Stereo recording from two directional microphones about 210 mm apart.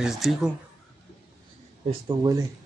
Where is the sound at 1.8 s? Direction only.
20° right (ahead or behind).